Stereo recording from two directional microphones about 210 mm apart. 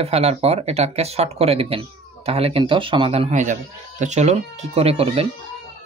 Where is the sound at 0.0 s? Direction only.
30° right (ahead or behind).